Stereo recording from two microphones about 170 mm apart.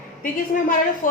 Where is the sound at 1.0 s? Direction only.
50° left (ahead or behind).